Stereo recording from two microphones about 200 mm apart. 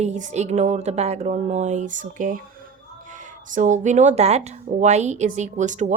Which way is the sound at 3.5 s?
40° right (ahead or behind).